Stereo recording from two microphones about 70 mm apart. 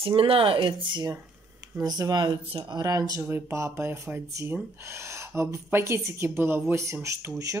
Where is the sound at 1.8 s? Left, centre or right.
Right.